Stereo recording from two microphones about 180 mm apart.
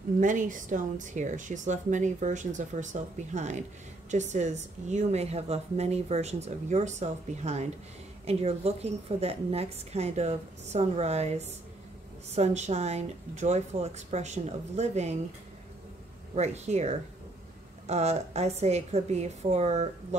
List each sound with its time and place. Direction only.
0.2 s a woman's voice: 45° right (ahead or behind)
16.3 s a woman's voice: 40° right (ahead or behind)